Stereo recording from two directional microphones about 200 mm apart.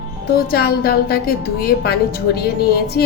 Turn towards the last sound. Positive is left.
turn(degrees=50)  # may be behind; listen again after turning